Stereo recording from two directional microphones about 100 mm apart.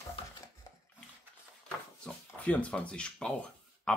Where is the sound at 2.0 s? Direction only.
15° left (ahead or behind).